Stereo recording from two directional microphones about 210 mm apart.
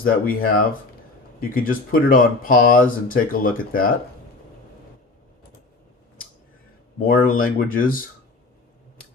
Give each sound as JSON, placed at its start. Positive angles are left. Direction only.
{"t": 0.0, "sound": "speech", "side_deg": 40}
{"t": 7.0, "sound": "speech", "side_deg": 45}